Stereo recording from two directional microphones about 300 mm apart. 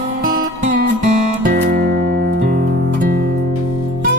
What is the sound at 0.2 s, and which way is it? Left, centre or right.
Music, right.